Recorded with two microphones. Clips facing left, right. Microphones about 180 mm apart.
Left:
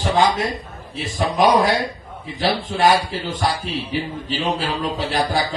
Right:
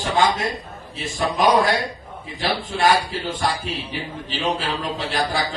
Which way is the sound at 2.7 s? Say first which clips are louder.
Left 2 dB; 45° left (ahead or behind).